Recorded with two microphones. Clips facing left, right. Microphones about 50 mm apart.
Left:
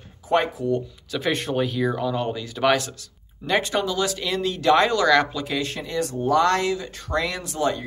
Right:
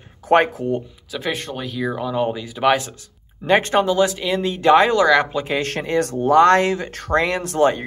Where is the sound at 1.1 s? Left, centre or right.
Centre.